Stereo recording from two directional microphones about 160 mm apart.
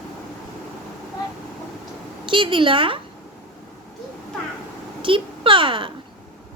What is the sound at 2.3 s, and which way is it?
Speech, 30° right (ahead or behind).